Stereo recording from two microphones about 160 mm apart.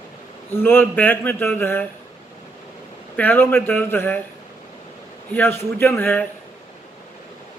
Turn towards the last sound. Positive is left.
turn(degrees=10)  # may be behind; listen again after turning